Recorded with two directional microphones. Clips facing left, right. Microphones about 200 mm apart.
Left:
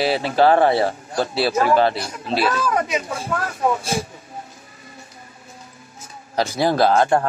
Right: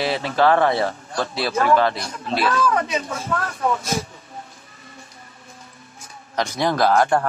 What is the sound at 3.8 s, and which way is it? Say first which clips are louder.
Speech: left 1 dB; 30° left (ahead or behind).